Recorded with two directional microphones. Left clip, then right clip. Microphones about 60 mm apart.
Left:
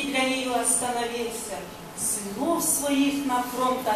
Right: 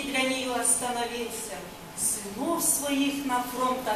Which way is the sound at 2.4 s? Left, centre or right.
Centre.